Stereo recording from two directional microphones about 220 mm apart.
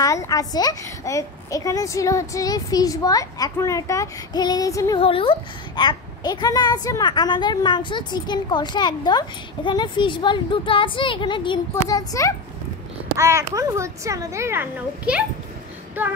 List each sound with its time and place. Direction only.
0.0 s a woman's voice: 15° left (ahead or behind)
5.0 s a child's voice: 25° left (ahead or behind)
13.2 s a child's voice: 15° right (ahead or behind)